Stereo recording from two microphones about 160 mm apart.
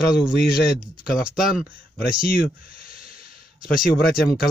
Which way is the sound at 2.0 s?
65° left (ahead or behind).